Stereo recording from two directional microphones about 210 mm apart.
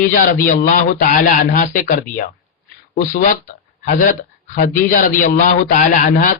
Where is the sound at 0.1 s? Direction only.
40° left (ahead or behind).